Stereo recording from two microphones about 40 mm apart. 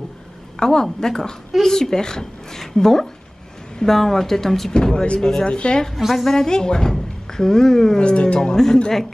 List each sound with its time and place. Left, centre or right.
0.6 s a woman's voice: centre
4.7 s speech: left
5.9 s a woman's voice: centre
6.3 s speech: centre
8.0 s speech: left